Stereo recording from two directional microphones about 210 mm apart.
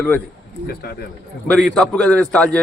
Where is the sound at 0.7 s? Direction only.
45° left (ahead or behind).